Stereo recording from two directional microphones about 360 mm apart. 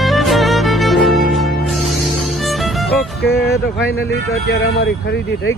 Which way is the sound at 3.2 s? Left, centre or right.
Left.